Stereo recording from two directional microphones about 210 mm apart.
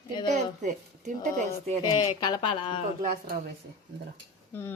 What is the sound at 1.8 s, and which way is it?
Speech, 20° left (ahead or behind).